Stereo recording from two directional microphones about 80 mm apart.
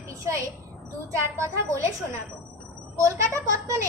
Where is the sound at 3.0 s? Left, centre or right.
Right.